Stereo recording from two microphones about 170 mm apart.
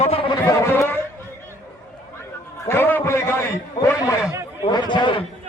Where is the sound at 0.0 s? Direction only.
35° left (ahead or behind).